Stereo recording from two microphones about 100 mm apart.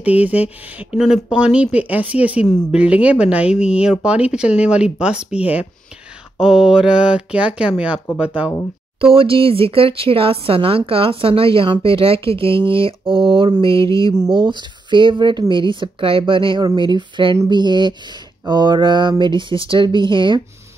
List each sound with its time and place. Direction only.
0.0 s speech: 15° right (ahead or behind)
0.9 s speech: 5° right (ahead or behind)
9.0 s speech: 65° right (ahead or behind)